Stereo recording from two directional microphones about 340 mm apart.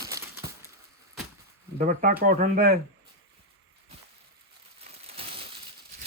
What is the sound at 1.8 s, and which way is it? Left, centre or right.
Speech, right.